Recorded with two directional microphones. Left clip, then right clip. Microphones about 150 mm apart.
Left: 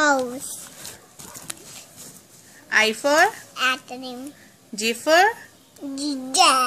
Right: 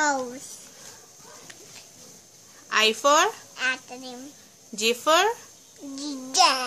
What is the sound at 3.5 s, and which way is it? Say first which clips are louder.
Speech: left 4 dB; 10° right (ahead or behind).